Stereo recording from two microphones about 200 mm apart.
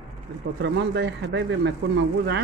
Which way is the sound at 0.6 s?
60° right (ahead or behind).